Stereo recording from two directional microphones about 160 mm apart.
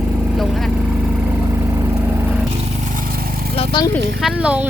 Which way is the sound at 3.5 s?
30° left (ahead or behind).